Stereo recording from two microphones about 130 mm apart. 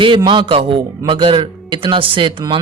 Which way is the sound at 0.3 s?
40° right (ahead or behind).